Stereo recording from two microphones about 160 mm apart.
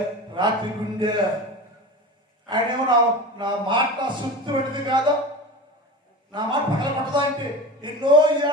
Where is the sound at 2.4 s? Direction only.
30° right (ahead or behind).